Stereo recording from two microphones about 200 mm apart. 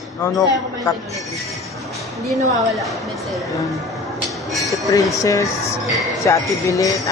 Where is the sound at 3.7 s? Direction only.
Centre (ahead or behind).